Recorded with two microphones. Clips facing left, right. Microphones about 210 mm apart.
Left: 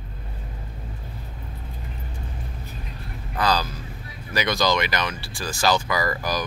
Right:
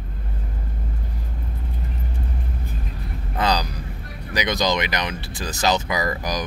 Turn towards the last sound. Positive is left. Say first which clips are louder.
# even
turn(degrees=-20)  # may be behind; listen again after turning